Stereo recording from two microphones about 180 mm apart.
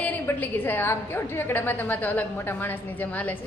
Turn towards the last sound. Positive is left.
turn(degrees=10)  # may be behind; listen again after turning